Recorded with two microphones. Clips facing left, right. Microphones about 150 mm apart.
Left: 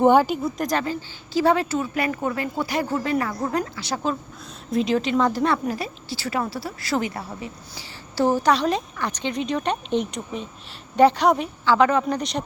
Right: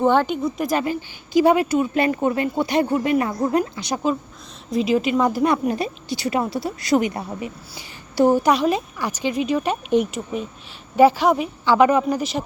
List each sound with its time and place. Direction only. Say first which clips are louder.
0.0 s a woman's voice: left 1 dB; 10° left (ahead or behind); by 1.9 s 15° right (ahead or behind)
2.0 s speech: right 5 dB; 25° right (ahead or behind)
4.7 s a woman's voice: right 2 dB; 5° right (ahead or behind)
5.6 s a woman's voice: right 5 dB; 25° right (ahead or behind); by 11.4 s 5° right (ahead or behind)
11.6 s a woman's voice: right 3 dB; 15° right (ahead or behind)
12.0 s a woman's voice: right 3 dB; 5° right (ahead or behind)